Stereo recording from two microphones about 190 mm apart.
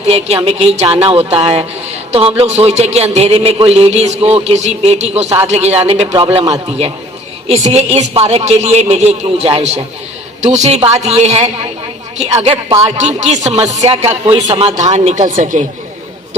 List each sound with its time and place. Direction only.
0.1 s a man's voice: 30° right (ahead or behind)
6.1 s speech: 15° right (ahead or behind)
6.5 s a man's voice: 30° right (ahead or behind)
14.1 s speech: 15° right (ahead or behind)
14.5 s a man's voice: 30° right (ahead or behind)